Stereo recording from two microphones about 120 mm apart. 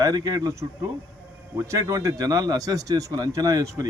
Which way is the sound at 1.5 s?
25° right (ahead or behind).